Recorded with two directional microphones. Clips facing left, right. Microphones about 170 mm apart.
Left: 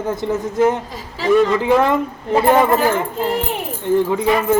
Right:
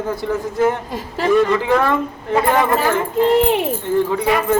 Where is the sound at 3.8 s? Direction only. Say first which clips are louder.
Left 6 dB; 15° left (ahead or behind).